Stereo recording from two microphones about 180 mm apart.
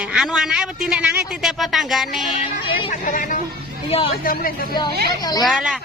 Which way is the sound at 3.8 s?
35° left (ahead or behind).